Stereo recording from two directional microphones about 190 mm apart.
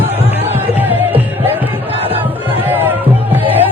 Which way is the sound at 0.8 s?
10° right (ahead or behind).